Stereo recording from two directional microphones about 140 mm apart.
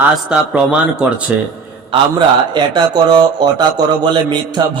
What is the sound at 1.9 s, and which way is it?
A man's voice, 35° right (ahead or behind).